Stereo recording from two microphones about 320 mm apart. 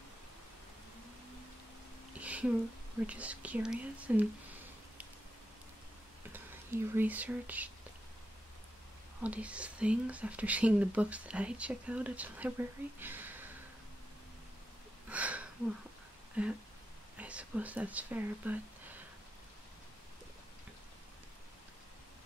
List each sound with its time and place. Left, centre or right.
2.1 s a sound: centre
3.1 s speech: centre
6.3 s speech: centre
9.2 s speech: centre
15.0 s a sound: centre
16.4 s speech: centre